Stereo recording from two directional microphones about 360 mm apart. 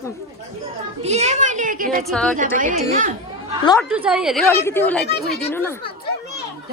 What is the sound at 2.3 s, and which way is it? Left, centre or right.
Speech, right.